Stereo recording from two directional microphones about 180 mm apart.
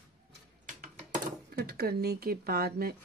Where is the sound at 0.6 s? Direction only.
55° right (ahead or behind).